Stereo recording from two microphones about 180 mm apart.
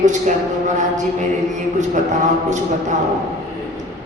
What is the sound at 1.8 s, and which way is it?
Speech, 45° right (ahead or behind).